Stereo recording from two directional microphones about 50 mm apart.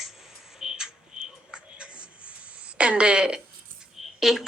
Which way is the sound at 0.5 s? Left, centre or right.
Centre.